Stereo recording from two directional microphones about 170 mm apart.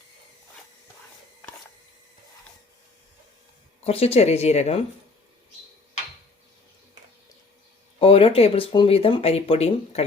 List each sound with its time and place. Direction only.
3.8 s speech: 35° left (ahead or behind)
7.9 s speech: 35° left (ahead or behind)